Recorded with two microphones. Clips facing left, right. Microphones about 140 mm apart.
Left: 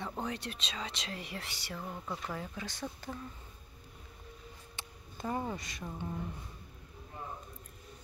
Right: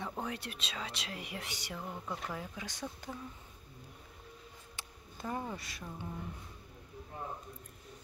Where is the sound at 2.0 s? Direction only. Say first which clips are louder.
Left 1 dB; 5° right (ahead or behind).